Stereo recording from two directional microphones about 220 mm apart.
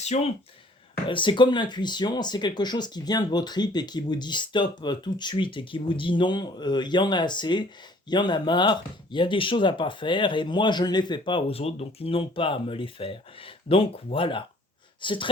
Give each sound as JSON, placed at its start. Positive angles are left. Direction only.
{"t": 1.0, "sound": "speech", "side_deg": 20}